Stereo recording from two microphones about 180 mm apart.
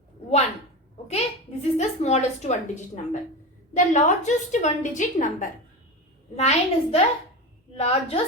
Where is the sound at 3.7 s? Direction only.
45° left (ahead or behind).